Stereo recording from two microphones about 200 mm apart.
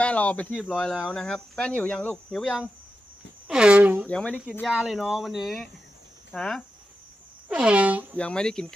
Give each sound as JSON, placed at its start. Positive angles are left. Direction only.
{"t": 0.0, "sound": "speech", "side_deg": 5}
{"t": 4.0, "sound": "speech", "side_deg": 5}
{"t": 8.1, "sound": "speech", "side_deg": 5}